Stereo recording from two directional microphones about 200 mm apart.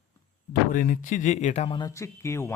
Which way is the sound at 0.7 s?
40° left (ahead or behind).